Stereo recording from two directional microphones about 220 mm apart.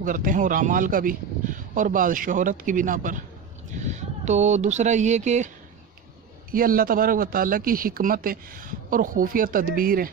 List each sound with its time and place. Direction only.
0.0 s speech: 40° right (ahead or behind)
6.5 s speech: 40° right (ahead or behind)